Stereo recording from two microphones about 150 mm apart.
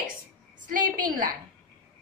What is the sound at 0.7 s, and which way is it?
Speech, 65° right (ahead or behind).